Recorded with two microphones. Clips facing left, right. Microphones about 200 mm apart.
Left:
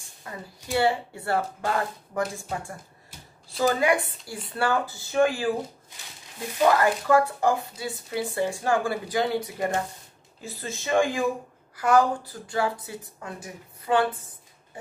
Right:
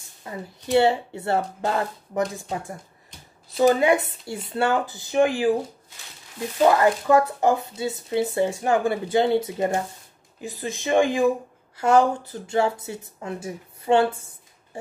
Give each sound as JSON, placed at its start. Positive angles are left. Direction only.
{"t": 0.2, "sound": "speech", "side_deg": -25}
{"t": 3.5, "sound": "speech", "side_deg": -25}
{"t": 6.6, "sound": "speech", "side_deg": -20}